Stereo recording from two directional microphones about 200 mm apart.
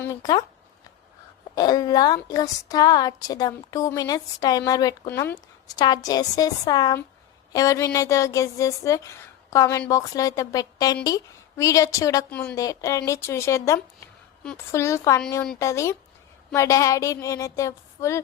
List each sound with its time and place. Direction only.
0.0 s speech: 20° left (ahead or behind)
1.5 s a woman's voice: 20° left (ahead or behind)